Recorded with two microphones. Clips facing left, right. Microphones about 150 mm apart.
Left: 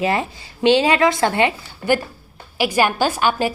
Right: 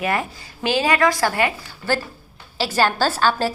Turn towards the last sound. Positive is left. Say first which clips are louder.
# left 1 dB
turn(degrees=15)  # may be behind; listen again after turning